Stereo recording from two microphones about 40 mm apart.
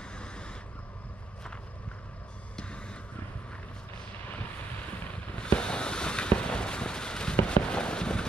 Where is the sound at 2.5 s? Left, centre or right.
Left.